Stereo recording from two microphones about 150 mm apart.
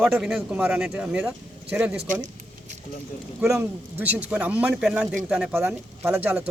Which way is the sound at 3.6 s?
10° right (ahead or behind).